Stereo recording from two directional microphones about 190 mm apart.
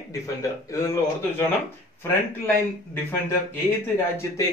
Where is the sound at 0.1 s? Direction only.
15° left (ahead or behind).